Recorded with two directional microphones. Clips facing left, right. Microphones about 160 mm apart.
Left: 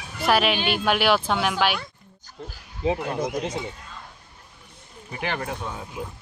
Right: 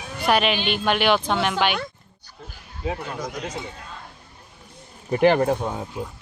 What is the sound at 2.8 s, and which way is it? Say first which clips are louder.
Speech: left 4 dB; 30° left (ahead or behind).